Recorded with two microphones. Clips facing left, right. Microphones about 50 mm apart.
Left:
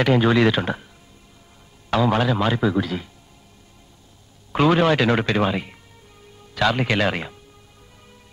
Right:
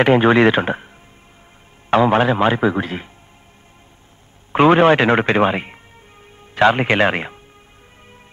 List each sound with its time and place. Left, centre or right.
0.0 s speech: right
1.9 s speech: right
4.5 s speech: right